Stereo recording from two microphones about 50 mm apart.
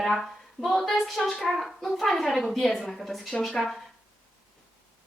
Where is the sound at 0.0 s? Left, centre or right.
Centre.